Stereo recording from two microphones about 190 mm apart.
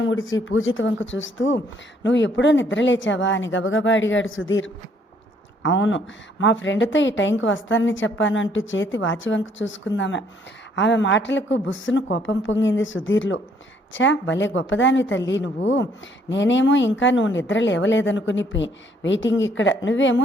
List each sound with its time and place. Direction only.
0.0 s a woman's voice: 90° left